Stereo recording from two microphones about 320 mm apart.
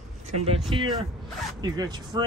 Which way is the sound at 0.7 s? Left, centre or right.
Centre.